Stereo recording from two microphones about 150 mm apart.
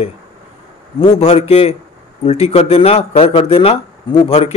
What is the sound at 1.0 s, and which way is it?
A man's voice, 40° left (ahead or behind).